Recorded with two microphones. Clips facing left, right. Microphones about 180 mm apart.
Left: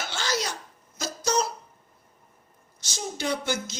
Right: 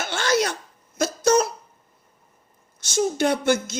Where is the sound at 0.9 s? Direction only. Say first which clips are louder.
Right 8 dB; 55° right (ahead or behind).